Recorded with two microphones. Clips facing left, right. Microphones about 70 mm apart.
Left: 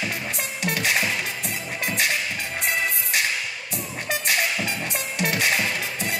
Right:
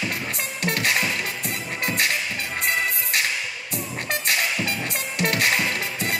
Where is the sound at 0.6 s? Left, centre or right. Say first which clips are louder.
Right 1 dB; right.